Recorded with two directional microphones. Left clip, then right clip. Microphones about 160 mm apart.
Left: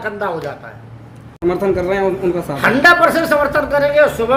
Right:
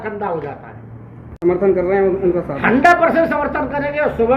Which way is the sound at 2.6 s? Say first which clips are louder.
Left 2 dB; 30° left (ahead or behind).